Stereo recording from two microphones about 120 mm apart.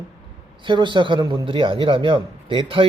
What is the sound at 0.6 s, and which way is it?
A man's voice, 40° right (ahead or behind).